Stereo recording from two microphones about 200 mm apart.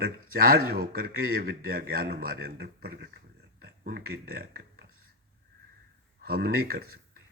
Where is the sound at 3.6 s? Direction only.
50° right (ahead or behind).